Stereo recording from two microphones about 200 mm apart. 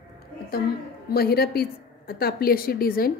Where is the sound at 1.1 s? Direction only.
50° left (ahead or behind).